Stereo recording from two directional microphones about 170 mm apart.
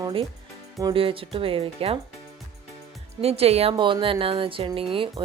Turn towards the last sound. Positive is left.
turn(degrees=-30)  # may be behind; listen again after turning